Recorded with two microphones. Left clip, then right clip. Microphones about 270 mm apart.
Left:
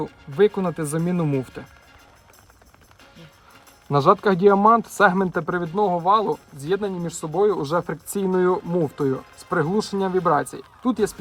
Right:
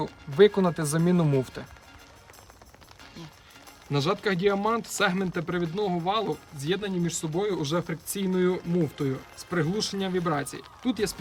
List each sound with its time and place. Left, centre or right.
0.0 s speech: centre
3.9 s speech: centre